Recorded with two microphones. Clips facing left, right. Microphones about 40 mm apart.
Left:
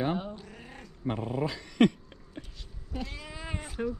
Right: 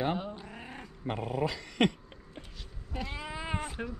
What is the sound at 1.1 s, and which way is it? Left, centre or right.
Dog, right.